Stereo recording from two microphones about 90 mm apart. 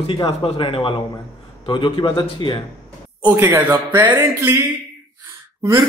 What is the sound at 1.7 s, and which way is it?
Speech, 65° left (ahead or behind).